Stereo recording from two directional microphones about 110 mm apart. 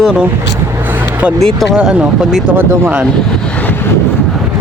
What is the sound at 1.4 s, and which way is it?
Speech, 5° left (ahead or behind).